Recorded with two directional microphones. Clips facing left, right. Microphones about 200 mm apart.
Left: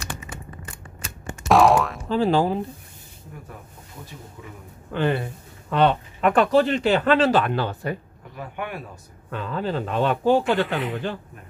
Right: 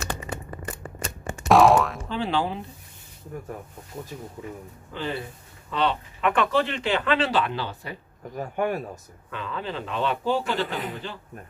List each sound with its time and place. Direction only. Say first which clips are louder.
1.5 s boing: even; centre (ahead or behind)
2.0 s speech: left 6 dB; 40° left (ahead or behind)
4.4 s speech: right 5 dB; 35° right (ahead or behind)
4.9 s speech: left 8 dB; 60° left (ahead or behind)
8.4 s speech: right 6 dB; 40° right (ahead or behind)
9.3 s speech: left 5 dB; 40° left (ahead or behind)